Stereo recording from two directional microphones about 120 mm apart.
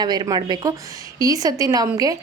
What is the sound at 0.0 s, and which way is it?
A woman's voice, 35° right (ahead or behind).